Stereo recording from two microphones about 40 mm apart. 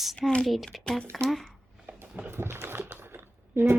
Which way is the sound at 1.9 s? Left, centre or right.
Right.